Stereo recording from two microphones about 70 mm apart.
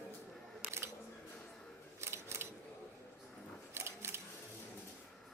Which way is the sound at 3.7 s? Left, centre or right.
Right.